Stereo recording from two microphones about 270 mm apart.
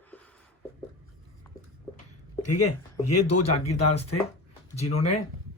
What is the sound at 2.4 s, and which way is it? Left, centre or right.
Speech, left.